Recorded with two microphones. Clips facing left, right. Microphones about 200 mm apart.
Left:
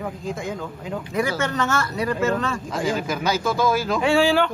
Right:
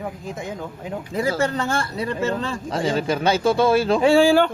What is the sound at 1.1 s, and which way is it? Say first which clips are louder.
Speech: right 2 dB; 30° right (ahead or behind).